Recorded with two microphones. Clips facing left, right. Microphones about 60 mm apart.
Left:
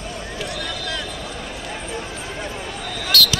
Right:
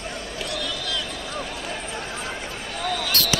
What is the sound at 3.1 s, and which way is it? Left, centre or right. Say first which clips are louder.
Basketball bounce: left 9 dB; right.